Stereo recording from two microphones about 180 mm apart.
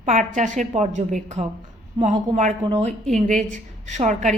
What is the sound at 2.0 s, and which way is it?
Speech, 30° right (ahead or behind).